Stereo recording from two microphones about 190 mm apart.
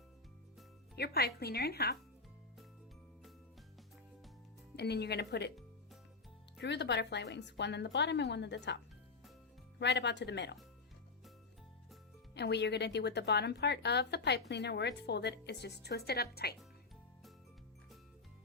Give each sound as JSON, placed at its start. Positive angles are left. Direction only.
{"t": 0.9, "sound": "a woman's voice", "side_deg": 60}
{"t": 4.8, "sound": "a woman's voice", "side_deg": 60}
{"t": 6.6, "sound": "a woman's voice", "side_deg": 65}
{"t": 12.3, "sound": "a woman's voice", "side_deg": 60}